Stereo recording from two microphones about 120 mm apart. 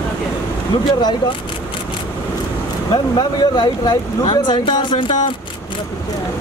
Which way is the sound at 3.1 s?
35° left (ahead or behind).